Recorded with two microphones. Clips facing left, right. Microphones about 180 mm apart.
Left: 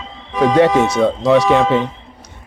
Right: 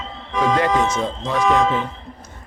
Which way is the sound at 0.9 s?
70° left (ahead or behind).